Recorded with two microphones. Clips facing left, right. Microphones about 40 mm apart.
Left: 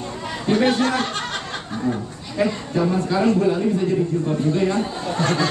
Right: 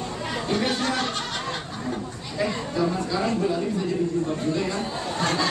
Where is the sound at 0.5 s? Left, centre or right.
Left.